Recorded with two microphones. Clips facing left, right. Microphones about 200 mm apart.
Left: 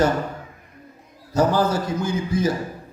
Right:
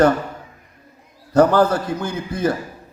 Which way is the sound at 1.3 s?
55° right (ahead or behind).